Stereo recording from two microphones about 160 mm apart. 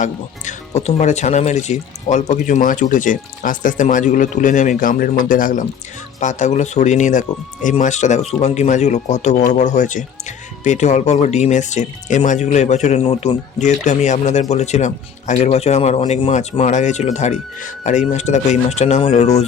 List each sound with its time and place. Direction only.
0.0 s speech: 45° left (ahead or behind)